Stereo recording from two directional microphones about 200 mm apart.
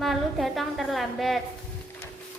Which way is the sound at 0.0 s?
Centre (ahead or behind).